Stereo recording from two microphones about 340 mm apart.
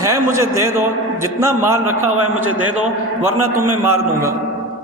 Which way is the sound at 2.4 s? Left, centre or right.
Right.